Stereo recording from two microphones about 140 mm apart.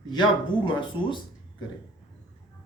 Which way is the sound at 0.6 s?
35° left (ahead or behind).